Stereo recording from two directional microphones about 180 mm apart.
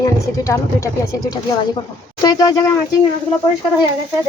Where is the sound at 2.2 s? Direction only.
20° left (ahead or behind).